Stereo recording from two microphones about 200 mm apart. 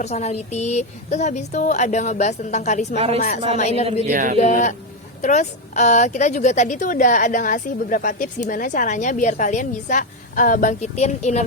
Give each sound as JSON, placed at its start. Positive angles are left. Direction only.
{"t": 0.0, "sound": "a woman's voice", "side_deg": 35}
{"t": 3.6, "sound": "a woman's voice", "side_deg": 35}
{"t": 4.0, "sound": "speech", "side_deg": -40}
{"t": 4.4, "sound": "a woman's voice", "side_deg": 35}